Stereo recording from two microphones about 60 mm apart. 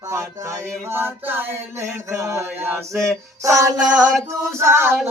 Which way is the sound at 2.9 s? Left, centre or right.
Centre.